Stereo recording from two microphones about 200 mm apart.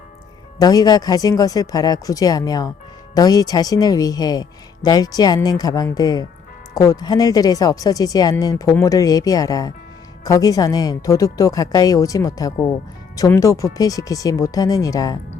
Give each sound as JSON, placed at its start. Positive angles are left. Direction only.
{"t": 0.6, "sound": "a woman's voice", "side_deg": 20}